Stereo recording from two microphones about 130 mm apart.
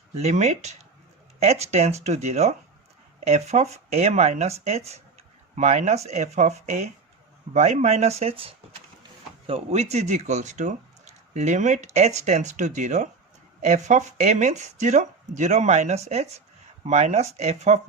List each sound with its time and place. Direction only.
0.2 s speech: 55° right (ahead or behind)